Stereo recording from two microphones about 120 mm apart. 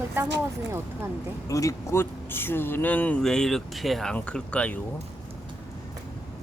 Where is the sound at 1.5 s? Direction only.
25° left (ahead or behind); by 4.8 s 10° left (ahead or behind).